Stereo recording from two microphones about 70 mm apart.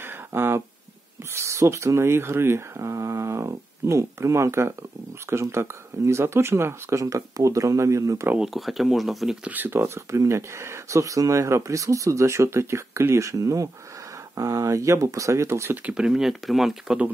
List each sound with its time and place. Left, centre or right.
0.0 s a sound: right
1.3 s speech: right
8.5 s speech: centre
9.4 s speech: right
15.9 s speech: centre